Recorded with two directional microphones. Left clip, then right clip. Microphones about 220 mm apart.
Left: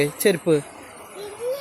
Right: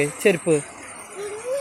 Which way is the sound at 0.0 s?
10° left (ahead or behind).